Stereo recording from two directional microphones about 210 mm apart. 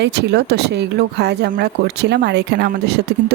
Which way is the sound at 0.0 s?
55° right (ahead or behind).